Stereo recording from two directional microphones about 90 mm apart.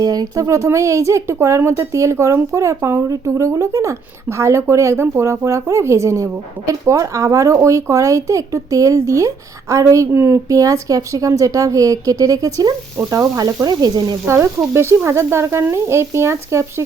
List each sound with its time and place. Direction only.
0.0 s speech: 45° right (ahead or behind)
13.1 s frying: 40° right (ahead or behind)
14.3 s speech: 30° right (ahead or behind)